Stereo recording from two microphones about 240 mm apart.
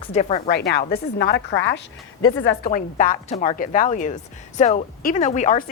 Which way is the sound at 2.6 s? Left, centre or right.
Left.